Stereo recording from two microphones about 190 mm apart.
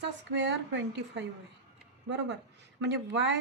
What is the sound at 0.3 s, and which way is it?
A woman's voice, 70° right (ahead or behind).